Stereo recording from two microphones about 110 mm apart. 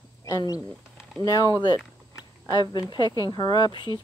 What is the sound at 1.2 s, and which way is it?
Speech, 40° left (ahead or behind).